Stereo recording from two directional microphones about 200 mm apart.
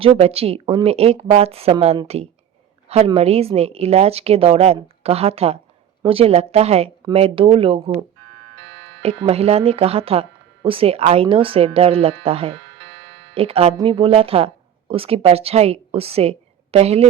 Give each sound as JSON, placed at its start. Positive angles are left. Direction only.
{"t": 0.0, "sound": "a woman's voice", "side_deg": -30}